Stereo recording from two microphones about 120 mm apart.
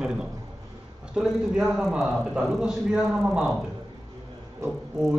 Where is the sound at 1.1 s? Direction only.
5° right (ahead or behind).